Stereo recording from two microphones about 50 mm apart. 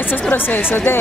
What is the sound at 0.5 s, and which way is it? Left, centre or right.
Speech, left.